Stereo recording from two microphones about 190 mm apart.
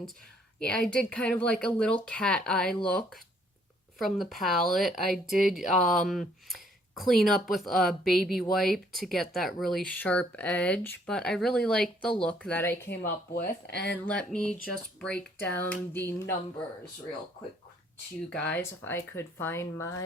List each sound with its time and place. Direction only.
0.6 s speech: 5° left (ahead or behind)
13.1 s speech: 50° left (ahead or behind)
13.9 s speech: 5° left (ahead or behind)
18.4 s speech: 10° left (ahead or behind)